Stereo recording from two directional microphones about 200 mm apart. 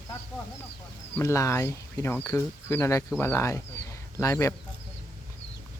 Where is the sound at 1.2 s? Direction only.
15° left (ahead or behind).